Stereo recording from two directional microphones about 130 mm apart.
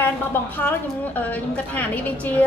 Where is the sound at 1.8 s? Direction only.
10° left (ahead or behind).